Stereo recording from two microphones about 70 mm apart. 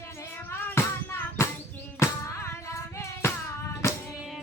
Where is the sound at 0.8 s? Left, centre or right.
Left.